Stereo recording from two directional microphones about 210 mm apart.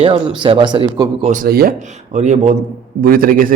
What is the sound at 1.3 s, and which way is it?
A man's voice, 45° right (ahead or behind).